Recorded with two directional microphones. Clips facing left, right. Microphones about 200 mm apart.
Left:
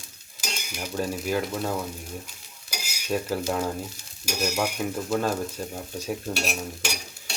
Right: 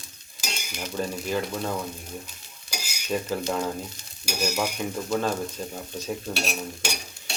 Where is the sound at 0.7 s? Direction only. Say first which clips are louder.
Left 1 dB; 5° left (ahead or behind).